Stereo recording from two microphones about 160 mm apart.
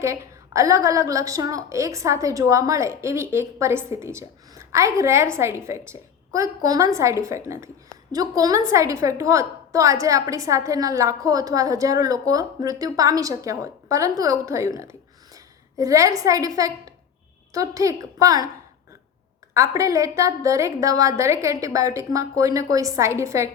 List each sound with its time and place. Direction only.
0.0 s a woman's voice: 20° right (ahead or behind)
15.8 s a woman's voice: 20° right (ahead or behind)
19.5 s a woman's voice: 20° right (ahead or behind)